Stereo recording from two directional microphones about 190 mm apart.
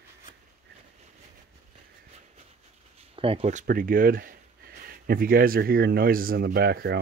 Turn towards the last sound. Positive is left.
turn(degrees=-55)  # may be behind; listen again after turning